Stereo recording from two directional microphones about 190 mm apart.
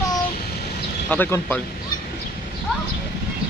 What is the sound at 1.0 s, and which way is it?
Speech, 10° left (ahead or behind).